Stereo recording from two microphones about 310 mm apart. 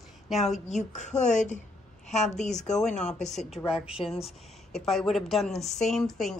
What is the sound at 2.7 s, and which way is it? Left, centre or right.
A woman's voice, centre.